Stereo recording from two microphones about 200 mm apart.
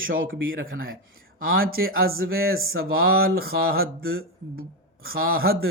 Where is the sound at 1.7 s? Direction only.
50° right (ahead or behind).